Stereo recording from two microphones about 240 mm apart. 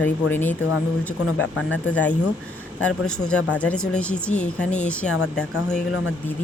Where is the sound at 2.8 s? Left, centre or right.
Centre.